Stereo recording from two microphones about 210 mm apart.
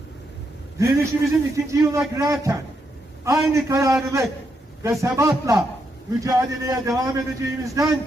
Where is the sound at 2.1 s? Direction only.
15° right (ahead or behind).